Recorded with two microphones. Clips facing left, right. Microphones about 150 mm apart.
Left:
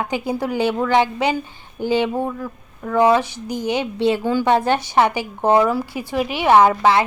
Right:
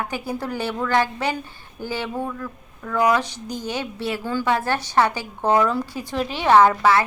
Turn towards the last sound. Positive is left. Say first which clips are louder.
# left 2 dB
turn(degrees=20)  # may be behind; listen again after turning